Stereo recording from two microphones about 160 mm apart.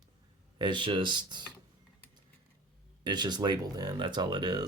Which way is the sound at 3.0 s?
25° right (ahead or behind).